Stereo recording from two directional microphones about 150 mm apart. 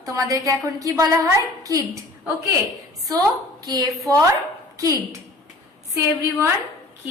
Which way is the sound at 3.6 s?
25° right (ahead or behind).